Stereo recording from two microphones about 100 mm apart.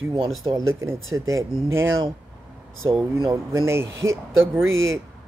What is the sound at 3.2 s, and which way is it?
Speech, 35° right (ahead or behind).